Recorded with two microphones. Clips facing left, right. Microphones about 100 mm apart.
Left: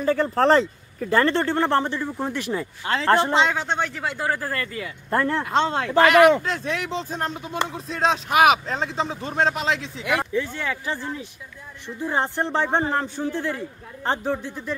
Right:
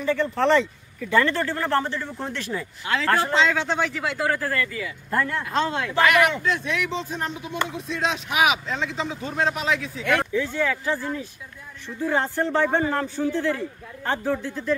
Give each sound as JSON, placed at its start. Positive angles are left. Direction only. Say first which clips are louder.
{"t": 0.0, "sound": "speech", "louder": "left 2 dB", "side_deg": 40}
{"t": 2.5, "sound": "speech", "louder": "left 1 dB", "side_deg": 30}
{"t": 4.5, "sound": "speech", "louder": "right 2 dB", "side_deg": 35}
{"t": 10.0, "sound": "speech", "louder": "right 1 dB", "side_deg": 10}
{"t": 13.3, "sound": "speech", "louder": "right 3 dB", "side_deg": 15}